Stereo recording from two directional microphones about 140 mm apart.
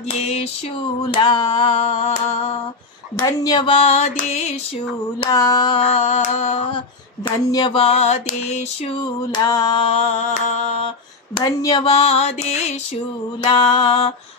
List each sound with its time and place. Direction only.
0.2 s mantra: 45° left (ahead or behind)
1.1 s music: 30° left (ahead or behind)
1.7 s mantra: 50° left (ahead or behind)
3.2 s mantra: 35° left (ahead or behind); by 4.4 s 50° left (ahead or behind)
5.3 s mantra: 25° left (ahead or behind)
5.8 s carnatic music: 50° left (ahead or behind)
7.2 s mantra: 35° left (ahead or behind); by 8.6 s 50° left (ahead or behind)
9.3 s music: 30° left (ahead or behind)
9.8 s mantra: 50° left (ahead or behind)
11.3 s music: 30° left (ahead or behind)
11.9 s mantra: 45° left (ahead or behind)
13.4 s music: 35° left (ahead or behind)